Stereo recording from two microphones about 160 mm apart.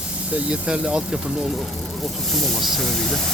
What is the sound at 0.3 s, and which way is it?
Speech, 5° right (ahead or behind).